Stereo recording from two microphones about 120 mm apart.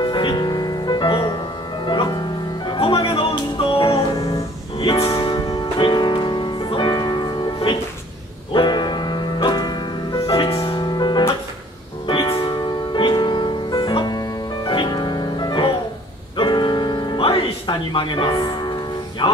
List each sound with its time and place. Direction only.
0.0 s music: 40° left (ahead or behind)